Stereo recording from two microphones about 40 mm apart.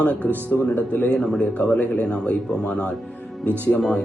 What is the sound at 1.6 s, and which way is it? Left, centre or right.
Speech, left.